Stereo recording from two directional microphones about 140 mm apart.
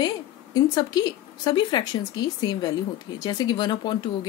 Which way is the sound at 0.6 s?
30° left (ahead or behind).